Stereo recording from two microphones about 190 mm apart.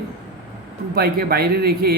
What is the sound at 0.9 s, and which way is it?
Speech, 55° right (ahead or behind).